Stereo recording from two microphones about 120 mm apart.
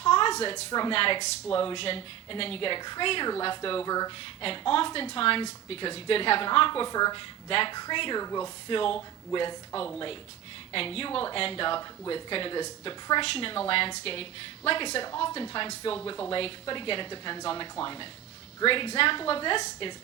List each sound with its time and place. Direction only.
0.0 s a sound: 45° left (ahead or behind)
0.5 s speech: 35° left (ahead or behind)
0.9 s a woman's voice: 50° left (ahead or behind)
3.8 s speech: 30° left (ahead or behind)
4.4 s a woman's voice: 45° left (ahead or behind)
8.2 s speech: 30° left (ahead or behind)
8.7 s a woman's voice: 50° left (ahead or behind)